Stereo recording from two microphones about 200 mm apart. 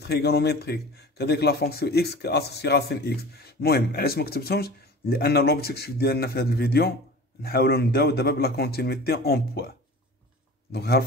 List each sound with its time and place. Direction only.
0.0 s speech: 55° left (ahead or behind)